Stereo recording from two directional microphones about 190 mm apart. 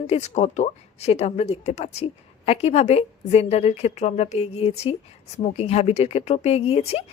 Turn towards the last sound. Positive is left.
turn(degrees=30)  # may be behind; listen again after turning